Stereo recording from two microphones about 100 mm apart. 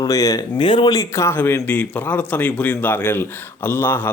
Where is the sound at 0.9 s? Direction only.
30° left (ahead or behind).